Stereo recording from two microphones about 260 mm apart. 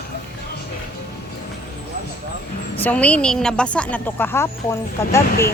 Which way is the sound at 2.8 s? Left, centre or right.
Centre.